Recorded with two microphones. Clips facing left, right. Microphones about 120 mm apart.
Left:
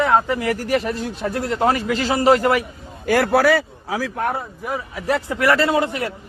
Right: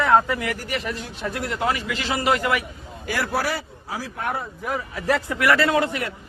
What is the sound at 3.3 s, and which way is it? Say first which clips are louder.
Speech: left 9 dB; 90° left.